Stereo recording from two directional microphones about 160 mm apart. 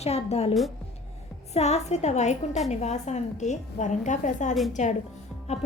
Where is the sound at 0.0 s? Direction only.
40° left (ahead or behind).